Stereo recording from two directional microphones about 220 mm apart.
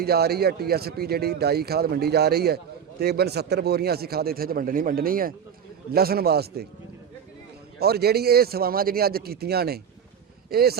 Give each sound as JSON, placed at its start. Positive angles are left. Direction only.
{"t": 0.0, "sound": "a man's voice", "side_deg": -45}
{"t": 7.8, "sound": "a man's voice", "side_deg": -45}